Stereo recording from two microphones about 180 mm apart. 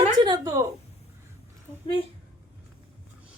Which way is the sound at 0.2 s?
25° right (ahead or behind).